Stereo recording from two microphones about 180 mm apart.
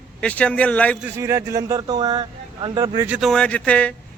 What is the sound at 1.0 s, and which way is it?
Speech, 15° right (ahead or behind).